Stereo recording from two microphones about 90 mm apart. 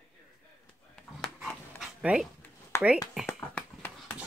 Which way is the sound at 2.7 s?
30° left (ahead or behind).